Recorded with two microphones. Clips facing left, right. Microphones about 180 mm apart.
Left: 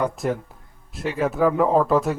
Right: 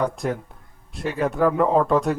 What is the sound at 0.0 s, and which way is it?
Speech, centre (ahead or behind).